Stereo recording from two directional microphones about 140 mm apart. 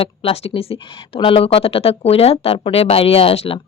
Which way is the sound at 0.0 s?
40° left (ahead or behind).